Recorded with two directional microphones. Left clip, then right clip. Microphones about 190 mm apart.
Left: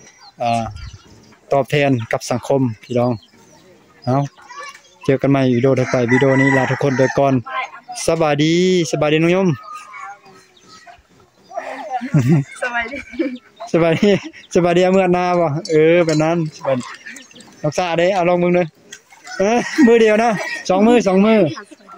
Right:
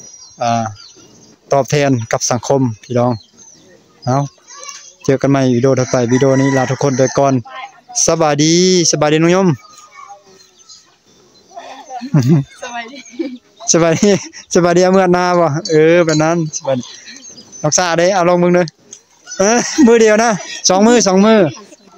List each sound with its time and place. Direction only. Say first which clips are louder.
0.4 s speech: right 3 dB; 20° right (ahead or behind)
7.4 s a sound: left 5 dB; 55° left (ahead or behind)
8.0 s speech: right 4 dB; 20° right (ahead or behind)
11.5 s wild animals: left 5 dB; 5° right (ahead or behind)
12.6 s a sound: left 4 dB; centre (ahead or behind)
13.7 s speech: right 3 dB; 20° right (ahead or behind)